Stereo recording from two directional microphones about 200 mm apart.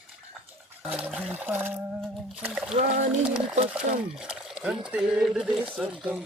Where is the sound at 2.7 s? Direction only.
35° right (ahead or behind).